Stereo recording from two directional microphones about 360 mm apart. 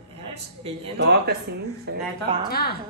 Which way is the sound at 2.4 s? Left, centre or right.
Left.